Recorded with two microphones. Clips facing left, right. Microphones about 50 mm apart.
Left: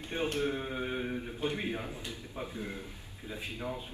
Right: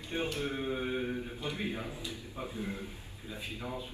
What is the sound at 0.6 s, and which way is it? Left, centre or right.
Mantra, left.